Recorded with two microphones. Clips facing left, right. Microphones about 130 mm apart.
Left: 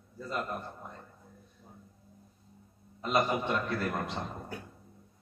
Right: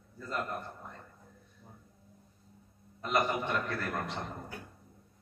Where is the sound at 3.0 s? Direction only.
20° left (ahead or behind).